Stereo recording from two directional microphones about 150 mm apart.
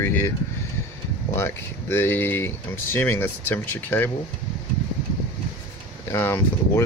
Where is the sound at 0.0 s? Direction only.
15° left (ahead or behind).